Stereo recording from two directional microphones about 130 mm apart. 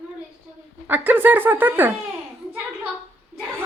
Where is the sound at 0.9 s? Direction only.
15° right (ahead or behind).